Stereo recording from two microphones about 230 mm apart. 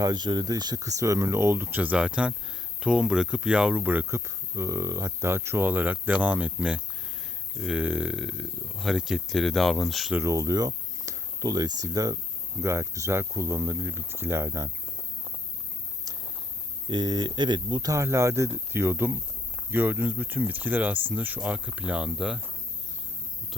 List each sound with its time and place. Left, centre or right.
0.0 s speech: centre
16.1 s a sound: centre
16.9 s speech: centre